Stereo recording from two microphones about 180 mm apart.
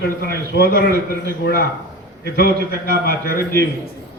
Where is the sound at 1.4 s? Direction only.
55° left (ahead or behind).